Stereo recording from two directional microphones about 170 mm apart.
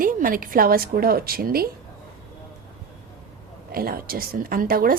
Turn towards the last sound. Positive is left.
turn(degrees=-60)  # may be behind; listen again after turning